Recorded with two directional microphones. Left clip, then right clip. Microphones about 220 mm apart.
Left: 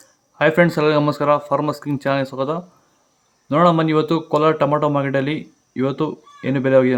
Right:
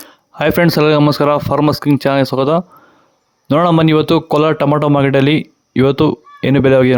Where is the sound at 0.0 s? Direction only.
45° right (ahead or behind).